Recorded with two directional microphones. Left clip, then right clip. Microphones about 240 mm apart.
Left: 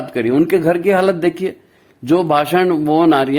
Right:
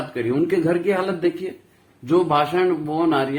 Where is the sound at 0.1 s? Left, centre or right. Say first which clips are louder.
Left 8 dB; left.